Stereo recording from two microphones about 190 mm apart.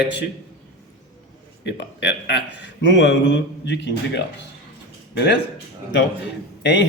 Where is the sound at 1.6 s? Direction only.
65° left (ahead or behind).